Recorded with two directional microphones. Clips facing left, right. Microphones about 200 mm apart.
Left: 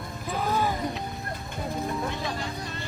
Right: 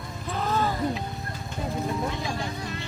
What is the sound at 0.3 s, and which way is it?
Music, 10° left (ahead or behind).